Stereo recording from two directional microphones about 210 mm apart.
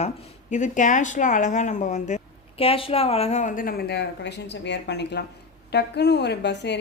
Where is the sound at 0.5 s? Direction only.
35° left (ahead or behind).